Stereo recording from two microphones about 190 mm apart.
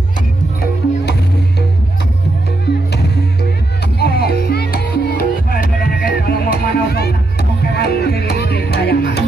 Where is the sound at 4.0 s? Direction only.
55° left (ahead or behind).